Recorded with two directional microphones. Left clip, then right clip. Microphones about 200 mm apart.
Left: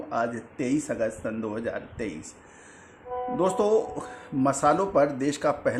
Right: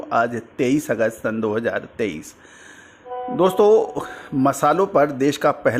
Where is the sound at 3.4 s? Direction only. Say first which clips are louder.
Right 9 dB; 35° right (ahead or behind).